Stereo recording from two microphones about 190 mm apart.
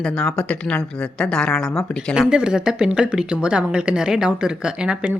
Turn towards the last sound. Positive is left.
turn(degrees=-5)  # may be behind; listen again after turning